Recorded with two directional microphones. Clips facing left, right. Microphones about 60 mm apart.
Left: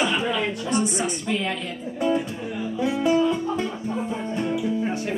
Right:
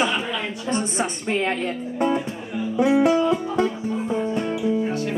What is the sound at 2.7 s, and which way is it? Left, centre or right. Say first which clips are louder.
Music: right 6 dB; right.